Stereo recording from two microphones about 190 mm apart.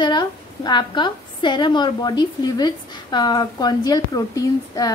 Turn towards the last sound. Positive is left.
turn(degrees=20)  # may be behind; listen again after turning